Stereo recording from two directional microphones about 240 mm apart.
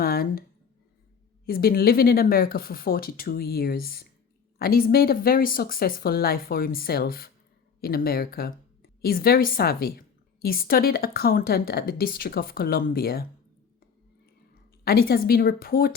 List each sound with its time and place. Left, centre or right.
0.0 s a sound: left
1.5 s a woman's voice: left
14.8 s a woman's voice: left